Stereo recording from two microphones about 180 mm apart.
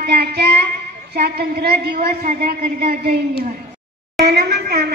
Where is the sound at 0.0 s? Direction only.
60° right (ahead or behind).